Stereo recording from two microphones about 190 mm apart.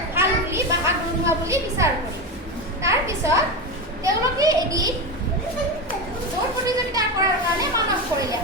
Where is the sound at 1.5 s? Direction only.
15° right (ahead or behind).